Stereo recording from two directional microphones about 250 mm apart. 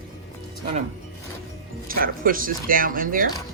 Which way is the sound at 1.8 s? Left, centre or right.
Right.